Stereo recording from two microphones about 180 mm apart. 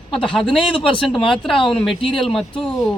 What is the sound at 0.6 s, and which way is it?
Speech, 30° left (ahead or behind).